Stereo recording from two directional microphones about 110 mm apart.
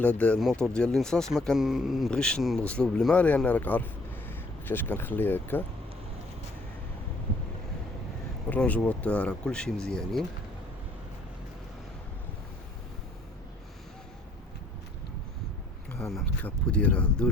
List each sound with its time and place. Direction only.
0.0 s speech: 15° left (ahead or behind)
0.3 s speech: 5° left (ahead or behind)
2.0 s speech: 5° left (ahead or behind)
8.4 s speech: 15° left (ahead or behind)
16.4 s speech: 10° left (ahead or behind)